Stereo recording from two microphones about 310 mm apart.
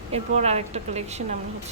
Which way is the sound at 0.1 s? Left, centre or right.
Right.